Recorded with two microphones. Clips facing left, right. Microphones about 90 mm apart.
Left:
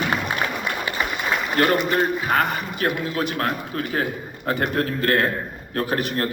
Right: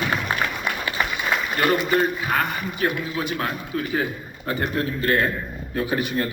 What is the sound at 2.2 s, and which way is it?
A man's voice, 40° left (ahead or behind).